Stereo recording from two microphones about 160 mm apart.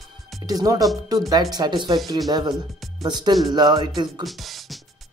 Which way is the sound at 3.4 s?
25° right (ahead or behind).